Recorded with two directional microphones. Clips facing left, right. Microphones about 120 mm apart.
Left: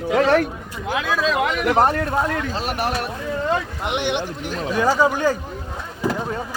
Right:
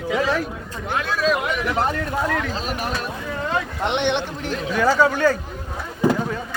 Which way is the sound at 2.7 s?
65° left (ahead or behind).